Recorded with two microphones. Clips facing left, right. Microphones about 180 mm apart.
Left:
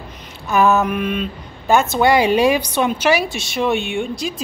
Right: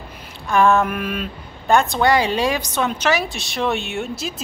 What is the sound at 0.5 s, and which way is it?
Speech, 5° left (ahead or behind).